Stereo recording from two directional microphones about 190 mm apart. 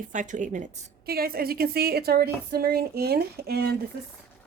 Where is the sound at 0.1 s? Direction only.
40° right (ahead or behind).